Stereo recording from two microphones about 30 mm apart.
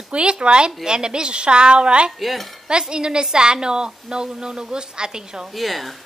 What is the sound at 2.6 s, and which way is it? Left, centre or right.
A woman's voice, right.